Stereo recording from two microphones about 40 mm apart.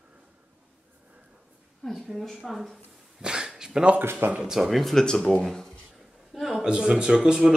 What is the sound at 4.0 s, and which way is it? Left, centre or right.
Speech, right.